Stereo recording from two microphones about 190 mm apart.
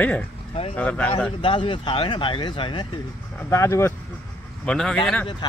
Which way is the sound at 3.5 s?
15° left (ahead or behind).